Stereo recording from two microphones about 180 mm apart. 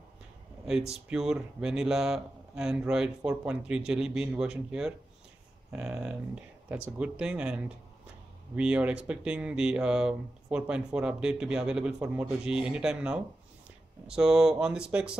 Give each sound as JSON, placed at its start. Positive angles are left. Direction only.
{"t": 0.7, "sound": "speech", "side_deg": -5}